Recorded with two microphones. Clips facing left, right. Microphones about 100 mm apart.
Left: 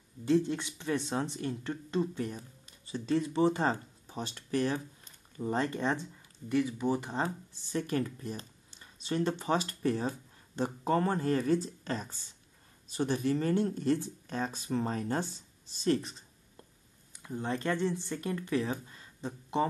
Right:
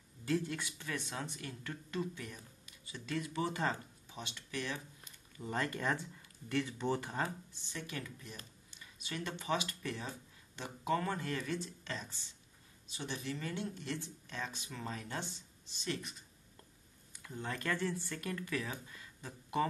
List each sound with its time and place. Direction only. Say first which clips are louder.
0.2 s speech: left 8 dB; 25° left (ahead or behind)
5.4 s speech: left 6 dB; 25° left (ahead or behind)
6.5 s speech: left 6 dB; 15° left (ahead or behind)
7.6 s speech: left 13 dB; 40° left (ahead or behind)